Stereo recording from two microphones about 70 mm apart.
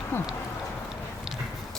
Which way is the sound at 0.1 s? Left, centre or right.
Left.